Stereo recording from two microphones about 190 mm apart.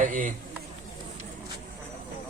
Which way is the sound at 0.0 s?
45° right (ahead or behind).